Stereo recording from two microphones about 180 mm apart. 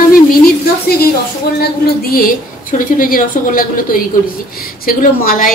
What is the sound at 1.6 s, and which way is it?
A woman's voice, 55° left (ahead or behind).